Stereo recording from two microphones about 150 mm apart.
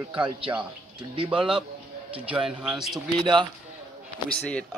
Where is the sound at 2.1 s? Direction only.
10° right (ahead or behind).